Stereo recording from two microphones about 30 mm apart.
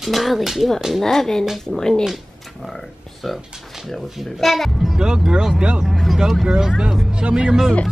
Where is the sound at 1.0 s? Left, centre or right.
Centre.